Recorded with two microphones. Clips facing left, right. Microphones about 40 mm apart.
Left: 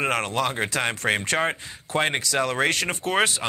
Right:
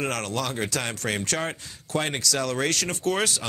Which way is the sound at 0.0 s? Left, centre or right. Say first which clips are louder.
Left 4 dB; left.